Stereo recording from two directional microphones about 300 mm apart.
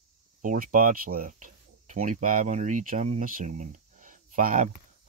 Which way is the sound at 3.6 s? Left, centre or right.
Right.